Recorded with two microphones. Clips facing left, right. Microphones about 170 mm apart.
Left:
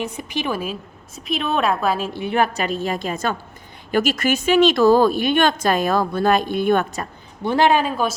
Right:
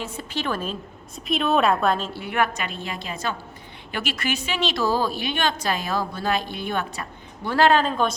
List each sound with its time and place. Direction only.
0.0 s a woman's voice: 15° left (ahead or behind)
2.1 s a woman's voice: 25° left (ahead or behind); by 7.1 s 50° left (ahead or behind)
7.4 s a woman's voice: 15° left (ahead or behind)